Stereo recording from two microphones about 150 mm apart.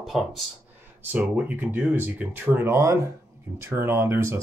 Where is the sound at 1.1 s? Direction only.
10° right (ahead or behind).